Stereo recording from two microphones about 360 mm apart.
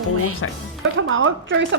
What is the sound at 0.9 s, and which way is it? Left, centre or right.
Speech, right.